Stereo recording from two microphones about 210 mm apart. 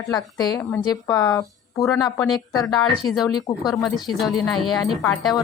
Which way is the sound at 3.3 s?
20° left (ahead or behind).